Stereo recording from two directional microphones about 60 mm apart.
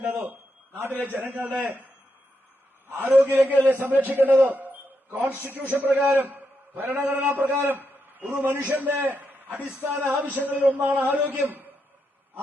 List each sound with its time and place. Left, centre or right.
0.0 s a sound: right
0.8 s a man's voice: right
2.8 s a man's voice: right
6.1 s a sound: right
6.9 s a man's voice: right
9.8 s music: right
10.1 s a man's voice: right